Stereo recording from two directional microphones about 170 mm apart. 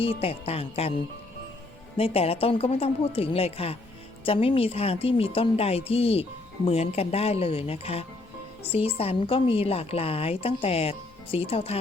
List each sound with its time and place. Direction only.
0.0 s a woman's voice: 35° left (ahead or behind)
2.0 s a woman's voice: 35° left (ahead or behind)